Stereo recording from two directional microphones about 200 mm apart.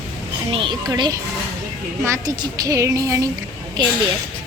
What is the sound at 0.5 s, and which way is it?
A woman's voice, 25° right (ahead or behind).